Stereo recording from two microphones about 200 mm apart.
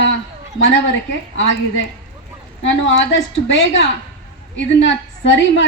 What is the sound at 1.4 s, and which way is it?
A woman's voice, 75° left (ahead or behind).